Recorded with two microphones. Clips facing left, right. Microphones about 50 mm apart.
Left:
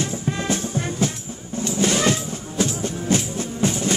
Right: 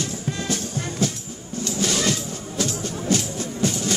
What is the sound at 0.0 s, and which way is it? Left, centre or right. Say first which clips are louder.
Music: left 3 dB; left.